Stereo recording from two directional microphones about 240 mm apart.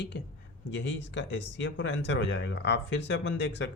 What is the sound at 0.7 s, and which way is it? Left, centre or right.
Speech, left.